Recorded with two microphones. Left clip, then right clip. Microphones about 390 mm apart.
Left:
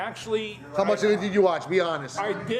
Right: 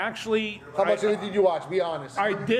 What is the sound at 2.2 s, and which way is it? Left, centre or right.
Speech, right.